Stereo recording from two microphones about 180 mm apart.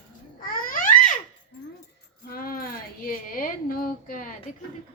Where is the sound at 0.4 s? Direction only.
50° left (ahead or behind).